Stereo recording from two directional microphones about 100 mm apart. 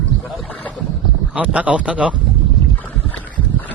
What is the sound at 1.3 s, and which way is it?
Speech, 15° right (ahead or behind).